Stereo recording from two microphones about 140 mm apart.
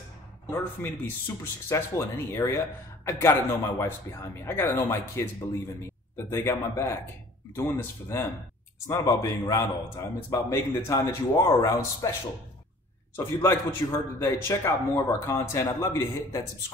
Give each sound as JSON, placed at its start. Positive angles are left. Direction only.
{"t": 0.5, "sound": "speech", "side_deg": 15}
{"t": 13.1, "sound": "speech", "side_deg": 15}